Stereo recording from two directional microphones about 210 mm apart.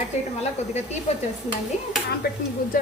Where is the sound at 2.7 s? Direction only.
40° left (ahead or behind).